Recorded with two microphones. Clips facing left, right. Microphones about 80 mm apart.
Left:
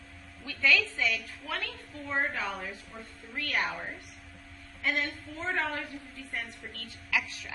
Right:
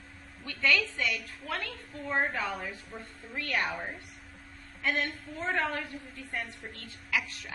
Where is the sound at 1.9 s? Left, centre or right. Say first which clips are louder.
Right 3 dB; right.